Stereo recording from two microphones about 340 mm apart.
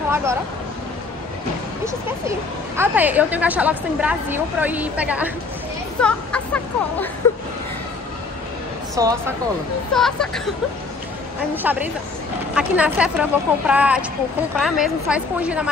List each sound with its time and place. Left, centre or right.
0.1 s speech: centre
1.9 s speech: centre
9.0 s speech: centre
9.9 s speech: centre
11.5 s speech: centre